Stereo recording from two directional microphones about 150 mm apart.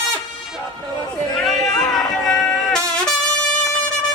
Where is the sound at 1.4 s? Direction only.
5° left (ahead or behind).